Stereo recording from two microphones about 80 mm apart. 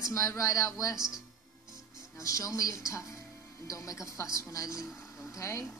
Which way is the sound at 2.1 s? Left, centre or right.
Left.